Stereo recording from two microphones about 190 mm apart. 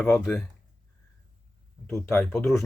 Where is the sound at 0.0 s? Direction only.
10° left (ahead or behind).